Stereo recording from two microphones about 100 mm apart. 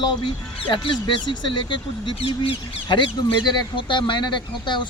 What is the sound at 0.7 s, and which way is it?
Speech, 55° left (ahead or behind).